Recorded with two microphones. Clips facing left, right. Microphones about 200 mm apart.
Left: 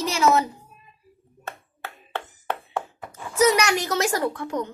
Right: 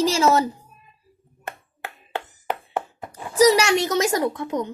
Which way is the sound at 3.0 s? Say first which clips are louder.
Right 4 dB; 25° right (ahead or behind).